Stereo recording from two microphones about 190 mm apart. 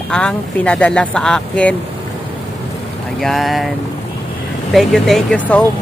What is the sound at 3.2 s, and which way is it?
Speech, centre (ahead or behind).